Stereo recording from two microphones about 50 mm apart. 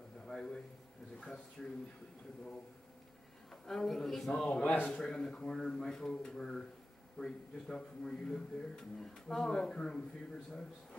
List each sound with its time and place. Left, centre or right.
0.3 s a sound: centre
1.1 s speech: centre
3.6 s a woman's voice: centre
4.3 s speech: centre
4.6 s a man's voice: left
4.9 s speech: centre